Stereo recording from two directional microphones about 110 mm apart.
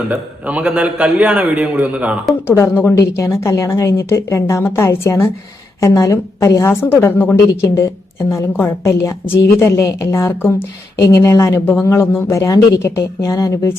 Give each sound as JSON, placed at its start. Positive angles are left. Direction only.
{"t": 0.1, "sound": "a man's voice", "side_deg": -15}
{"t": 2.5, "sound": "a woman's voice", "side_deg": 25}